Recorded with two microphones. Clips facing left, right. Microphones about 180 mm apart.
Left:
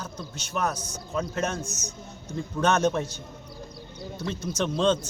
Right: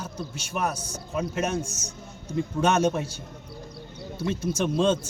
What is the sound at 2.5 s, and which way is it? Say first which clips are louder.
Speech: even; 10° right (ahead or behind).